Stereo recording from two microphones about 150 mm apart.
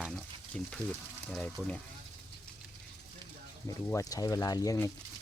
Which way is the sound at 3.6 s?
20° left (ahead or behind).